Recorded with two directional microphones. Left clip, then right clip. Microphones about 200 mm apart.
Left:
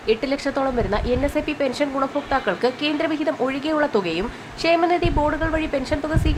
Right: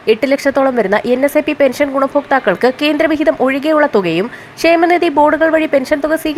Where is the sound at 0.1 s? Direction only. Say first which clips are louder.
Right 10 dB; 30° right (ahead or behind).